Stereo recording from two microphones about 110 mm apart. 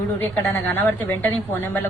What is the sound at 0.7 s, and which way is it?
Speech, 15° left (ahead or behind).